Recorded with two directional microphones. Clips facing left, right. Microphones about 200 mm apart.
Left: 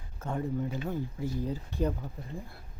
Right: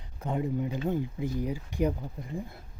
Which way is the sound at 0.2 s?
15° right (ahead or behind).